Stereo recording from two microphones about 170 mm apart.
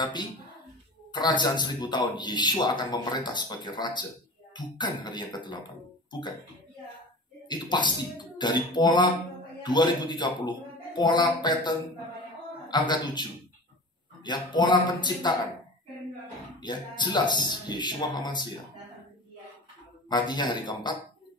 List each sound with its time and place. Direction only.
0.0 s a man's voice: 25° left (ahead or behind)
7.4 s a man's voice: 25° left (ahead or behind)
16.5 s a man's voice: 25° left (ahead or behind)
20.1 s a man's voice: 25° left (ahead or behind)